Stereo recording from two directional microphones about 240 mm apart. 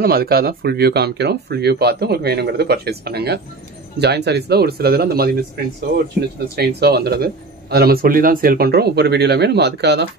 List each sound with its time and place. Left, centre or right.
0.0 s speech: right
6.5 s speech: right